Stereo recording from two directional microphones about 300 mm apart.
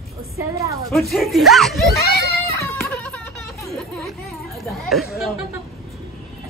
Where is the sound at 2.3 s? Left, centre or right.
Centre.